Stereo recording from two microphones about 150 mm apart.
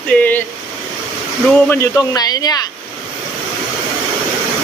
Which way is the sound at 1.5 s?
15° left (ahead or behind).